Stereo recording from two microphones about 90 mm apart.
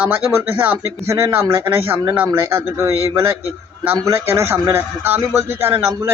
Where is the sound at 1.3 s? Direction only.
25° right (ahead or behind).